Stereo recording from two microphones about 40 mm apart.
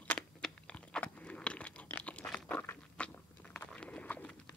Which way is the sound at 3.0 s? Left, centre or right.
Left.